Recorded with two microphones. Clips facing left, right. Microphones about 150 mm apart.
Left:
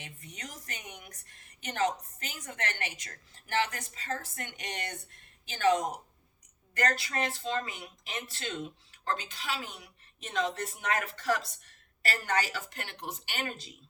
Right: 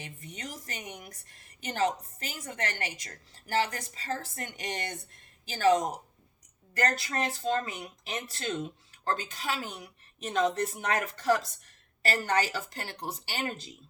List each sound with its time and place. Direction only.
0.0 s a woman's voice: 35° right (ahead or behind)